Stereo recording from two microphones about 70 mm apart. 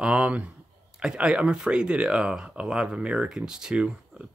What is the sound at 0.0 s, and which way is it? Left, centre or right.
Speech, centre.